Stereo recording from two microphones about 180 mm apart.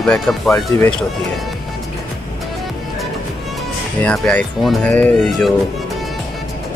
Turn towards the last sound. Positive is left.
turn(degrees=0)  # may be behind; listen again after turning